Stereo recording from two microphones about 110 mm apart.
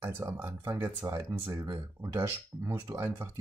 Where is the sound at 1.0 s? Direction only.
30° right (ahead or behind).